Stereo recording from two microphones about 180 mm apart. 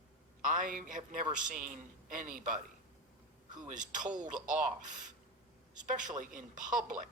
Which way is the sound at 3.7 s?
45° right (ahead or behind).